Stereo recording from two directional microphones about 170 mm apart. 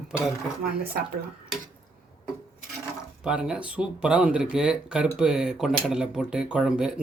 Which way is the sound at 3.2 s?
5° right (ahead or behind).